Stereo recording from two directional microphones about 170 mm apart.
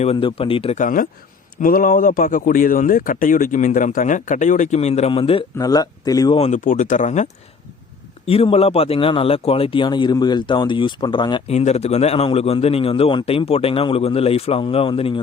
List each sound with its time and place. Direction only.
0.0 s speech: 35° left (ahead or behind)
0.8 s speech: 50° left (ahead or behind); by 5.5 s 30° left (ahead or behind)
5.5 s speech: 20° left (ahead or behind)
6.3 s speech: 40° left (ahead or behind)
8.3 s speech: 35° left (ahead or behind)
11.5 s speech: 40° left (ahead or behind)